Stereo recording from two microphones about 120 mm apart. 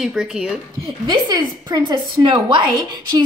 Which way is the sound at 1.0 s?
35° right (ahead or behind).